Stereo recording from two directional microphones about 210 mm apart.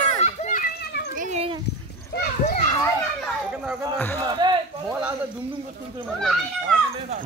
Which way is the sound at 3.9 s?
10° left (ahead or behind).